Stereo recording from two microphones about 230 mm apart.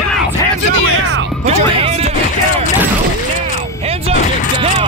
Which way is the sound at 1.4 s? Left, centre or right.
Right.